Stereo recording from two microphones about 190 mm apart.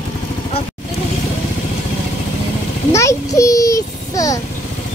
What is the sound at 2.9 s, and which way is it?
Child singing, 15° left (ahead or behind).